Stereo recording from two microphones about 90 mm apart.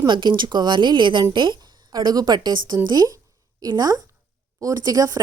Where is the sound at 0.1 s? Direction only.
60° right (ahead or behind).